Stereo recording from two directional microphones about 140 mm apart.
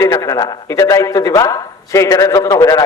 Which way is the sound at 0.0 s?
25° left (ahead or behind).